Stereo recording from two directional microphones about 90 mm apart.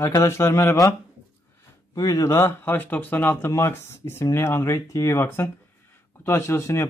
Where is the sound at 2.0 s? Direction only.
40° left (ahead or behind).